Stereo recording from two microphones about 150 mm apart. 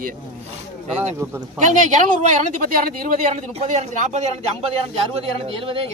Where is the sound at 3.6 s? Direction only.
50° right (ahead or behind).